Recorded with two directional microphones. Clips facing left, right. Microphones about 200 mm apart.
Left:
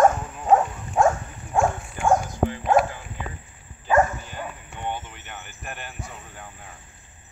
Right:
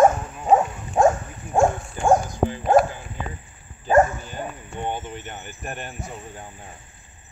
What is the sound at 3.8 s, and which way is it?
Dog, 40° right (ahead or behind).